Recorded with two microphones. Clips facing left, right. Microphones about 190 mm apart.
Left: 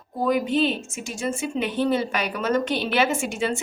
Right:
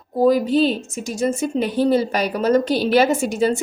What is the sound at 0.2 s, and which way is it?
A woman's voice, 35° right (ahead or behind).